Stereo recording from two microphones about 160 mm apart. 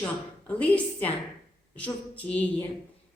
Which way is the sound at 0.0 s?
10° left (ahead or behind).